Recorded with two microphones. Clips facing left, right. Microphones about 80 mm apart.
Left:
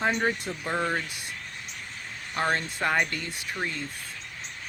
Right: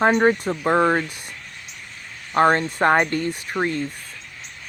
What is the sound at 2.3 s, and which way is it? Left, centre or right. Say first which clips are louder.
Speech: right 10 dB; right.